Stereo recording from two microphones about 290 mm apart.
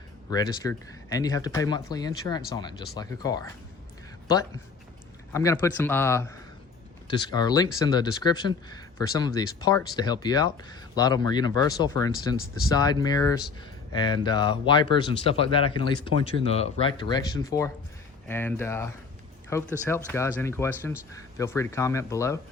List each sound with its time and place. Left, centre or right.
0.3 s speech: centre